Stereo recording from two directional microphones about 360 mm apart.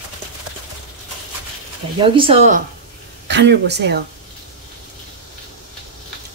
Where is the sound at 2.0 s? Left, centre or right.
Centre.